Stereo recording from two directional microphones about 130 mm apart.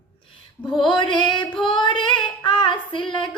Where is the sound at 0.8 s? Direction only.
35° left (ahead or behind).